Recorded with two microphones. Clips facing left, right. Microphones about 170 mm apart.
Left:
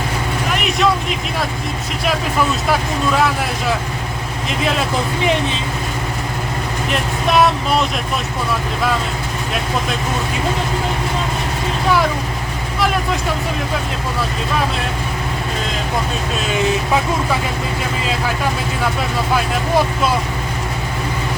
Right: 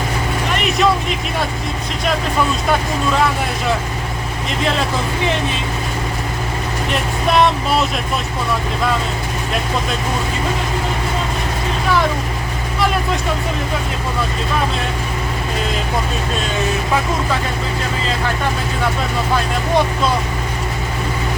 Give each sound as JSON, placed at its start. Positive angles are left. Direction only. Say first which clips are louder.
{"t": 0.5, "sound": "vehicle", "louder": "right 1 dB", "side_deg": 0}
{"t": 7.3, "sound": "speech", "louder": "even", "side_deg": 0}